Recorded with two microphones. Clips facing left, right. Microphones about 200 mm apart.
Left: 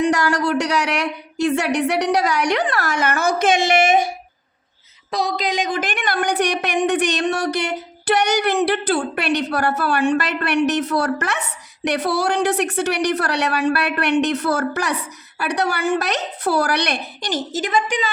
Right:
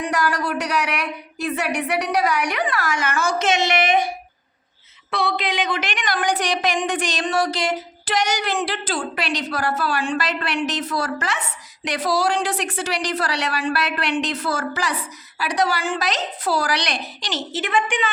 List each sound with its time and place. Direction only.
0.0 s a woman's voice: 80° left; by 4.1 s 45° left (ahead or behind)
5.1 s a woman's voice: 40° left (ahead or behind)